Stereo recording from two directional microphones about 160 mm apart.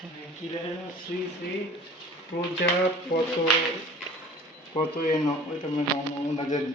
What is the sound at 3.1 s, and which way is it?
Speech, 70° left (ahead or behind).